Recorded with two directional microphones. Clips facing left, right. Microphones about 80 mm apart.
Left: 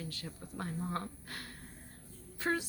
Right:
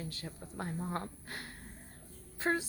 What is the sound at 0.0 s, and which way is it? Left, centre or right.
Speech, right.